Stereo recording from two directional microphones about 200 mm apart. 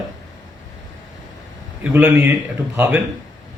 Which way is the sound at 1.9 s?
10° right (ahead or behind).